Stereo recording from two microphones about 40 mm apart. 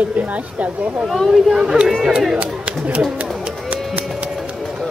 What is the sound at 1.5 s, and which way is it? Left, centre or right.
Speech, centre.